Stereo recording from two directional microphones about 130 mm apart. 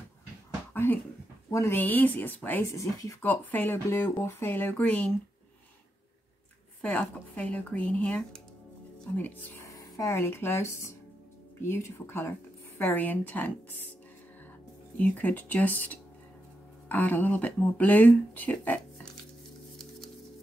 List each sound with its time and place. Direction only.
1.5 s speech: 20° left (ahead or behind)
2.7 s speech: 25° left (ahead or behind)
3.2 s speech: 15° left (ahead or behind)
6.8 s speech: 10° left (ahead or behind)
9.7 s speech: 25° left (ahead or behind)
15.0 s speech: 10° left (ahead or behind)